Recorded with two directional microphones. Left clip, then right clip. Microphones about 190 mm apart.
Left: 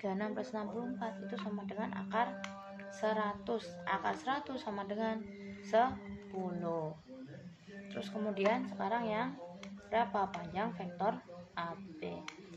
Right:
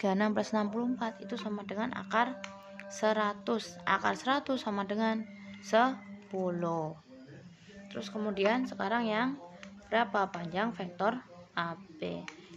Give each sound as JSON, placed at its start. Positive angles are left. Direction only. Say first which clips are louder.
{"t": 0.0, "sound": "a woman's voice", "louder": "right 8 dB", "side_deg": -45}
{"t": 7.9, "sound": "a woman's voice", "louder": "right 3 dB", "side_deg": -25}